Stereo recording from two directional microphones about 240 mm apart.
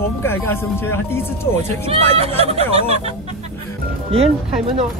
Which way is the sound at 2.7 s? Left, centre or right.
Right.